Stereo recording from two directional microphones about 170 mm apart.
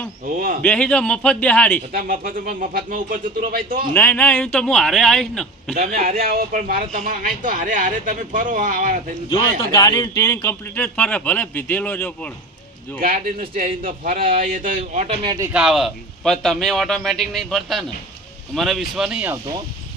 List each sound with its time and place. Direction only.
0.3 s speech: 55° right (ahead or behind)
0.6 s a man's voice: 5° left (ahead or behind)
1.9 s speech: 60° right (ahead or behind)
3.9 s a man's voice: 10° left (ahead or behind)
5.7 s speech: 55° right (ahead or behind)
9.6 s speech: 20° left (ahead or behind)
13.0 s speech: 60° right (ahead or behind)
15.0 s speech: 30° right (ahead or behind)
15.5 s a man's voice: centre (ahead or behind)